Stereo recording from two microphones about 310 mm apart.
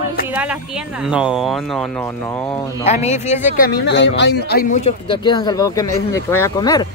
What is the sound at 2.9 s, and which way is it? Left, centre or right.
Speech, left.